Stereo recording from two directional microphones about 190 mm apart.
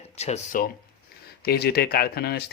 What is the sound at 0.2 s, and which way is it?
Speech, 35° left (ahead or behind).